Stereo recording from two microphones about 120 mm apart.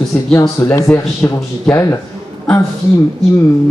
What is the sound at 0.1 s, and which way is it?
Speech, 10° left (ahead or behind).